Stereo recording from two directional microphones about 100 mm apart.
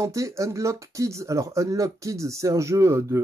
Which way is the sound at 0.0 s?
30° right (ahead or behind).